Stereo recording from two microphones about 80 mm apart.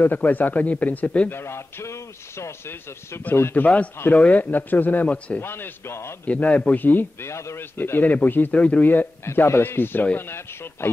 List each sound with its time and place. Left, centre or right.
0.0 s a man's voice: left
1.3 s a man's voice: left; by 5.4 s centre
5.4 s a man's voice: left
6.2 s a man's voice: centre